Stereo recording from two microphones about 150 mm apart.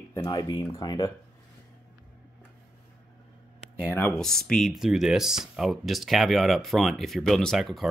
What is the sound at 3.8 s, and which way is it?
Speech, 15° left (ahead or behind).